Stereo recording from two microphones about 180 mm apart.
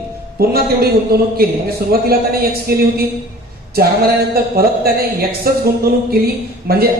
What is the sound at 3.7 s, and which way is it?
A man's voice, 60° right (ahead or behind).